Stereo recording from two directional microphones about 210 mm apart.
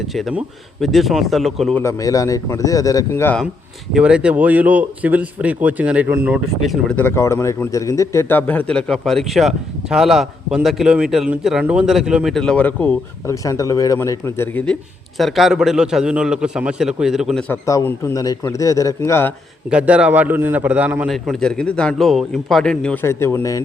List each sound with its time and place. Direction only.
0.1 s speech: centre (ahead or behind)
1.8 s a man's voice: 15° left (ahead or behind)
3.9 s speech: 5° right (ahead or behind)
17.5 s a man's voice: 10° left (ahead or behind)
19.7 s speech: 5° right (ahead or behind); by 23.6 s 15° left (ahead or behind)